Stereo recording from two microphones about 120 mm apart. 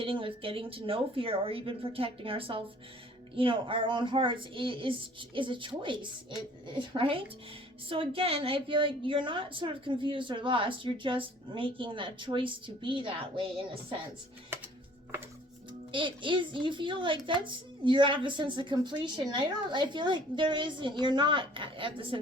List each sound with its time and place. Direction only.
0.0 s a woman's voice: 50° right (ahead or behind)
14.5 s music: 20° right (ahead or behind)
15.9 s a woman's voice: 45° right (ahead or behind)